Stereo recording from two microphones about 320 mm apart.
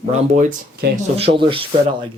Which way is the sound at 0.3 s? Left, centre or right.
Right.